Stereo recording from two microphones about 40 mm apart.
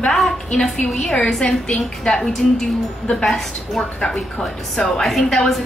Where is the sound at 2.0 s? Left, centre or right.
Centre.